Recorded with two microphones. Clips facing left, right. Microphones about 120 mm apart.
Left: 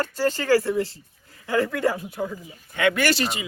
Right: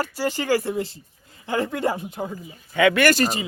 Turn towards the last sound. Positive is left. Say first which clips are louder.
# right 4 dB
turn(degrees=-40)  # may be behind; listen again after turning